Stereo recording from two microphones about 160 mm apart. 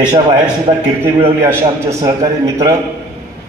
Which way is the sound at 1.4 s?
20° right (ahead or behind).